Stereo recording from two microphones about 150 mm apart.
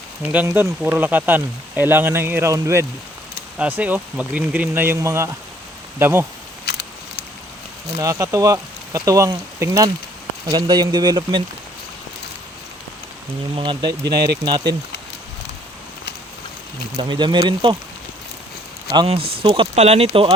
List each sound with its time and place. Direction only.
0.3 s speech: 15° right (ahead or behind)
6.7 s a sound: 90° left
7.9 s speech: 20° right (ahead or behind)
13.6 s speech: 30° right (ahead or behind)
14.1 s speech: 90° right
14.4 s speech: 30° right (ahead or behind)
17.0 s speech: 30° right (ahead or behind)
19.0 s speech: 40° right (ahead or behind)